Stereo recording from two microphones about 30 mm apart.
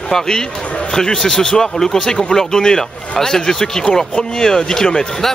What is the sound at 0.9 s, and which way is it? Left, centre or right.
Speech, left.